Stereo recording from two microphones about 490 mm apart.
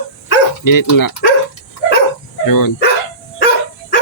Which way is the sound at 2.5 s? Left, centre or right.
Left.